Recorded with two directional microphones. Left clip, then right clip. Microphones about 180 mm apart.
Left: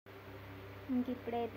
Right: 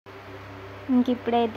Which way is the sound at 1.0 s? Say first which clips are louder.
Right 15 dB; 25° right (ahead or behind).